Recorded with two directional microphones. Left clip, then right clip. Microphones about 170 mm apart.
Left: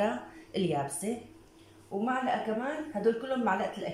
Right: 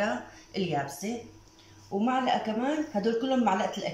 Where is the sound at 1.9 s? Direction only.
5° right (ahead or behind).